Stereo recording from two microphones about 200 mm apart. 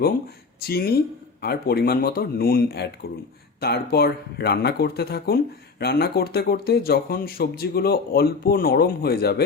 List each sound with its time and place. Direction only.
0.7 s speech: 50° left (ahead or behind)